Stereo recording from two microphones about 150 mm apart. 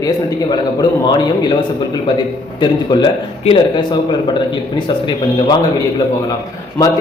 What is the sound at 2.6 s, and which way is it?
A man's voice, 30° left (ahead or behind).